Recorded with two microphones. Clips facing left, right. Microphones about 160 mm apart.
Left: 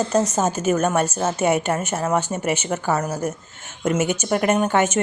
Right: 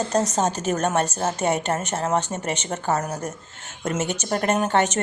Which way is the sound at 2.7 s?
25° right (ahead or behind).